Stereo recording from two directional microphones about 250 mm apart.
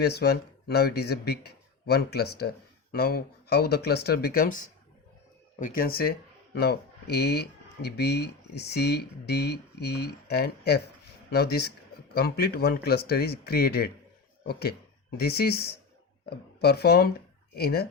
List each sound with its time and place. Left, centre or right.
0.0 s speech: left